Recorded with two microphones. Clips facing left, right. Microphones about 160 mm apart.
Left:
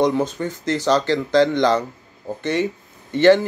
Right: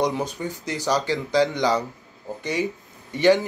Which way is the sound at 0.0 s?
15° right (ahead or behind).